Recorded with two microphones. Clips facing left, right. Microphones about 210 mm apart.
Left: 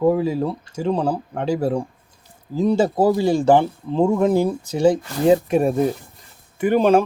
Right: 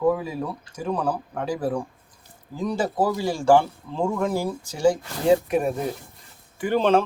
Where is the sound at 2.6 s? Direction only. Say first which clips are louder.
Left 7 dB; 25° left (ahead or behind).